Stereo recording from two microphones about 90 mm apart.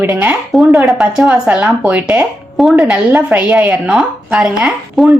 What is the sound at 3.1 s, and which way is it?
Speech, 15° right (ahead or behind).